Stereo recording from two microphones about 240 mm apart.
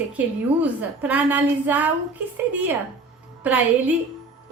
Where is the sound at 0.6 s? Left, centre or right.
Centre.